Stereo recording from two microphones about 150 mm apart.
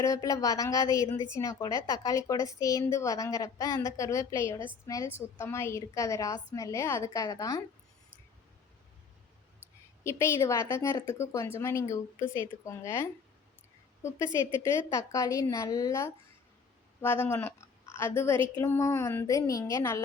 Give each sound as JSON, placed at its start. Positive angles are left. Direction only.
{"t": 0.0, "sound": "speech", "side_deg": 20}
{"t": 10.0, "sound": "speech", "side_deg": 20}
{"t": 14.6, "sound": "speech", "side_deg": 20}
{"t": 18.3, "sound": "speech", "side_deg": -35}
{"t": 18.6, "sound": "speech", "side_deg": 15}